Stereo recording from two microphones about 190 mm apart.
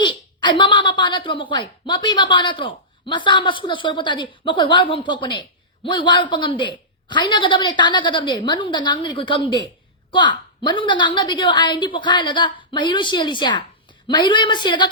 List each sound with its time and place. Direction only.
0.0 s a woman's voice: 25° left (ahead or behind)